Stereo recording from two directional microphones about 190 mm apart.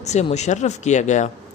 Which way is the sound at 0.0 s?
35° left (ahead or behind).